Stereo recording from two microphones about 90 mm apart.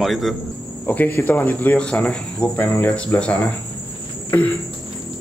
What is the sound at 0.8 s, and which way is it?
Speech, 20° left (ahead or behind).